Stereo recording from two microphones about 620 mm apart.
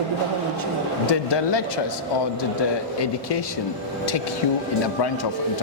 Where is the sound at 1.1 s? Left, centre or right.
Left.